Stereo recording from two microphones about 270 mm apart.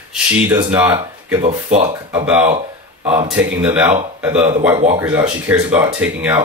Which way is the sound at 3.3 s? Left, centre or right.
Centre.